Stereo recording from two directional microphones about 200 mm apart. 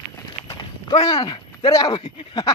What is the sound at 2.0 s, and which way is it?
Speech, 30° left (ahead or behind).